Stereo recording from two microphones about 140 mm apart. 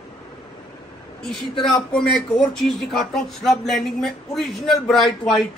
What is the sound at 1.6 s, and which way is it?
Speech, 5° left (ahead or behind).